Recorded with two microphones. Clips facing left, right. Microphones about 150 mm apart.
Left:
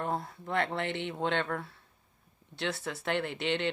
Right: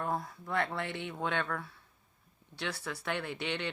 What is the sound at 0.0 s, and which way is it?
Speech, 25° left (ahead or behind).